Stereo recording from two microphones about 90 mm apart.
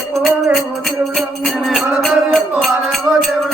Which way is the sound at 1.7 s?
Centre (ahead or behind).